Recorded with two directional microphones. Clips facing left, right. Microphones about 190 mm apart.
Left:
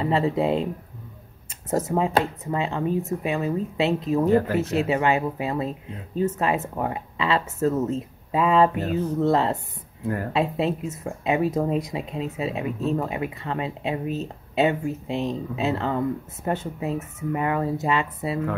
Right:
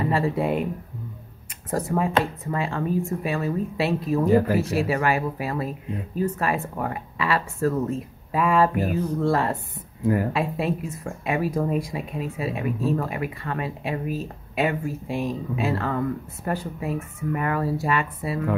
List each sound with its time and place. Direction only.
0.0 s speech: 25° left (ahead or behind)
1.7 s speech: 25° left (ahead or behind)
4.3 s speech: 10° right (ahead or behind)
4.7 s speech: 20° left (ahead or behind)
10.0 s speech: 10° right (ahead or behind)
10.3 s speech: 25° left (ahead or behind)